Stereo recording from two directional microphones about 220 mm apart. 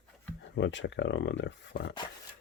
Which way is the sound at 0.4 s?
55° left (ahead or behind).